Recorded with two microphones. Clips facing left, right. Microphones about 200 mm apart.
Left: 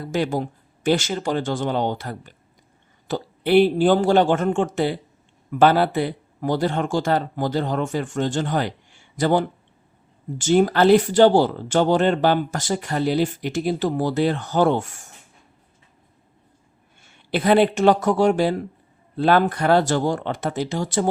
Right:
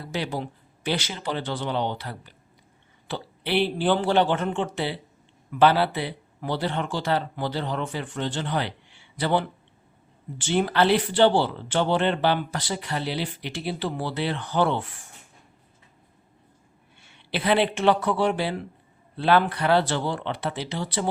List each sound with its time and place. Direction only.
0.0 s speech: 45° left (ahead or behind)
17.0 s speech: 45° left (ahead or behind)